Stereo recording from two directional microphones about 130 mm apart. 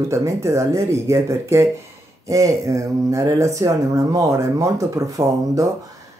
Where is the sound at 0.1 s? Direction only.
25° right (ahead or behind).